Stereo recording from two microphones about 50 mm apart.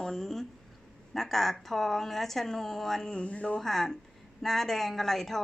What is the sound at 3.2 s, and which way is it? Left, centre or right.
Speech, left.